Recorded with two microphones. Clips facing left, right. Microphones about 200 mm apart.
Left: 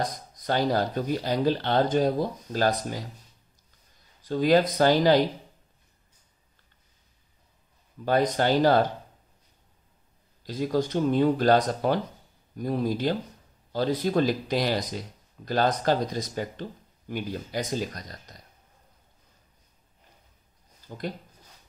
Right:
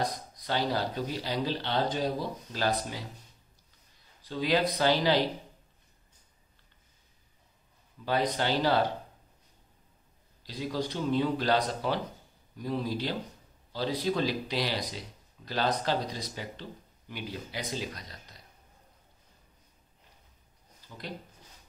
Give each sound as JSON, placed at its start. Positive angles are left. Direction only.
{"t": 0.0, "sound": "speech", "side_deg": 45}
{"t": 4.2, "sound": "speech", "side_deg": 45}
{"t": 8.0, "sound": "speech", "side_deg": 50}
{"t": 10.4, "sound": "speech", "side_deg": 50}
{"t": 20.9, "sound": "speech", "side_deg": 45}